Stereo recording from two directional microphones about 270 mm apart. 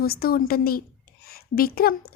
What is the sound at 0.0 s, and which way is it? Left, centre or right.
A woman's voice, left.